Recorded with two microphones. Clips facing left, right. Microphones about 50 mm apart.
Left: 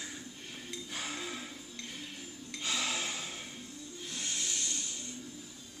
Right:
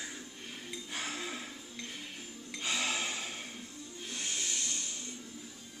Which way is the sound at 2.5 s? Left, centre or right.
Centre.